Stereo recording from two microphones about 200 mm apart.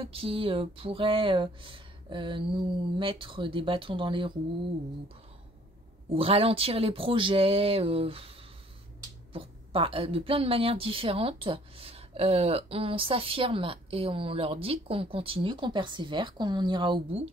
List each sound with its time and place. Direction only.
0.0 s a woman's voice: 25° right (ahead or behind)
6.1 s a woman's voice: 30° right (ahead or behind)
9.3 s a woman's voice: 25° right (ahead or behind)